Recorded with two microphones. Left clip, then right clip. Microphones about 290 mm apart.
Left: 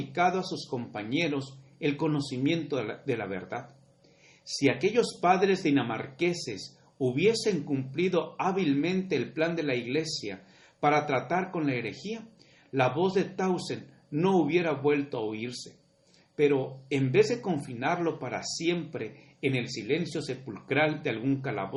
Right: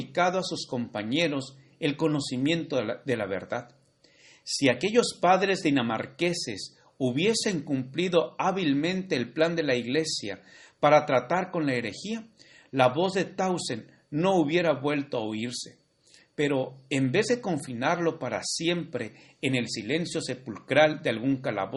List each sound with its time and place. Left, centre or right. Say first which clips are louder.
0.1 s speech: right 1 dB; right